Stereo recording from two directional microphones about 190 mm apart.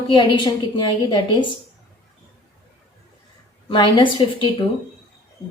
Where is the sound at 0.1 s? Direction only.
25° left (ahead or behind).